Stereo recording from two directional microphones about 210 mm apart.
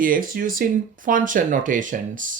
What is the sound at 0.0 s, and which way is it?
Speech, 40° right (ahead or behind).